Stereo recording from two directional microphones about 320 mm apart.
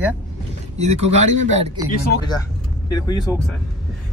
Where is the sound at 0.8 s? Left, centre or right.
Right.